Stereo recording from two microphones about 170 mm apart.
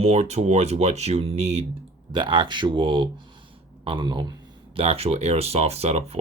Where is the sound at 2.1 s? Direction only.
30° right (ahead or behind).